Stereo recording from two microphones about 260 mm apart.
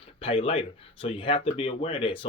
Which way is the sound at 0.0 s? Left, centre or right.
Left.